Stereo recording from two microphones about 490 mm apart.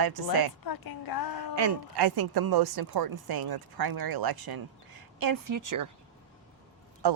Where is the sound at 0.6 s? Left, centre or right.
Left.